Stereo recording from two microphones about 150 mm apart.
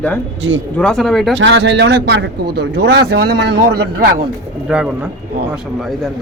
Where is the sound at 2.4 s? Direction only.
90° right.